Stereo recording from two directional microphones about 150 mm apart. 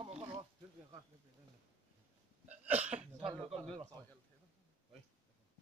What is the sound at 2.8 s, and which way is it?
Hiccup, 50° right (ahead or behind).